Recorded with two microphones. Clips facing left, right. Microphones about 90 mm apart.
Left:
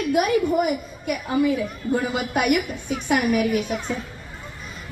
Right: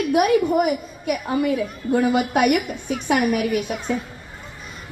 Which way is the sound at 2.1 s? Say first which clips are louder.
Right 4 dB; 50° right (ahead or behind).